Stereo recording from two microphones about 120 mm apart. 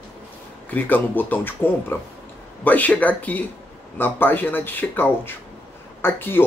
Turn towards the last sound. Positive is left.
turn(degrees=20)  # may be behind; listen again after turning